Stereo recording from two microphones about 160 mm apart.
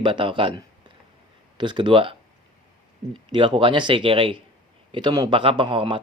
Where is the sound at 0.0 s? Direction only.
30° right (ahead or behind).